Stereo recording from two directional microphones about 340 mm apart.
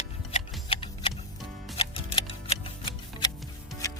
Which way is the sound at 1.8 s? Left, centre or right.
Centre.